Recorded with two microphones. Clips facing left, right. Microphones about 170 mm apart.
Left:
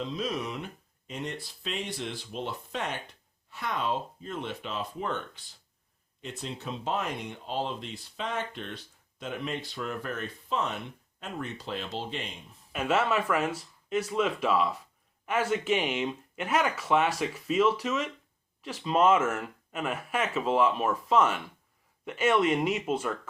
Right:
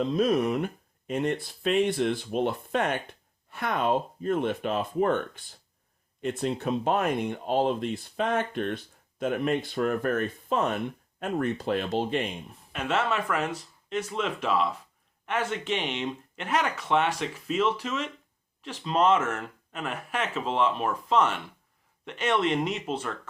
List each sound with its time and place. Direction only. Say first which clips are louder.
0.0 s speech: right 9 dB; 50° right (ahead or behind)
12.7 s speech: left 1 dB; 5° left (ahead or behind)